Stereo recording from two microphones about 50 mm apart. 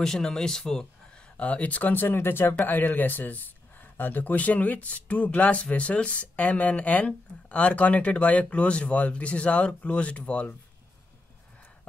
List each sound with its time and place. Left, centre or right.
0.0 s speech: centre
1.3 s speech: left
2.6 s speech: left